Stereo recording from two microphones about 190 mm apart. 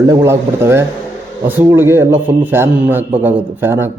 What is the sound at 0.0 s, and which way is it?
Mantra, 15° right (ahead or behind).